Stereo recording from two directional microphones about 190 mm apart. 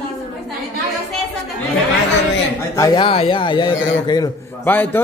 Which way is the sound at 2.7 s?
20° left (ahead or behind).